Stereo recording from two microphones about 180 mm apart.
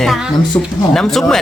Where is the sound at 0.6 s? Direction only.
15° left (ahead or behind).